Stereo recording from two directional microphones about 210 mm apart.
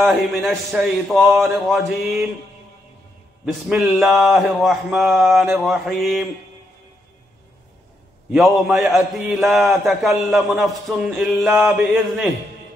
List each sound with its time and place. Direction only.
0.0 s a man's voice: centre (ahead or behind)
3.6 s a man's voice: centre (ahead or behind)
8.3 s a man's voice: centre (ahead or behind)